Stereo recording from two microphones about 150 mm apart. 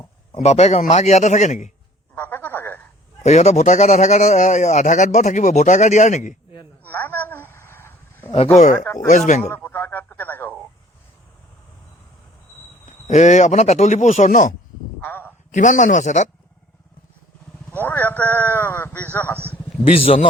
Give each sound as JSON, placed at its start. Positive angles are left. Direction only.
{"t": 0.3, "sound": "a man's voice", "side_deg": 45}
{"t": 2.1, "sound": "telephone", "side_deg": 10}
{"t": 3.2, "sound": "a man's voice", "side_deg": 50}
{"t": 6.8, "sound": "a sound", "side_deg": 10}
{"t": 8.5, "sound": "speech", "side_deg": 55}
{"t": 9.6, "sound": "radio", "side_deg": 15}
{"t": 12.8, "sound": "a man's voice", "side_deg": 55}
{"t": 15.0, "sound": "a sound", "side_deg": 15}
{"t": 15.5, "sound": "speech", "side_deg": 55}
{"t": 17.8, "sound": "a man's voice", "side_deg": 10}